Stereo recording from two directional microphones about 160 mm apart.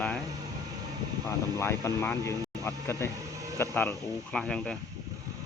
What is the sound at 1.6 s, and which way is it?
Speech, 15° left (ahead or behind).